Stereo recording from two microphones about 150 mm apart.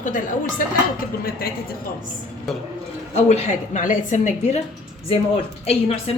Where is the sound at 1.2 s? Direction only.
90° left.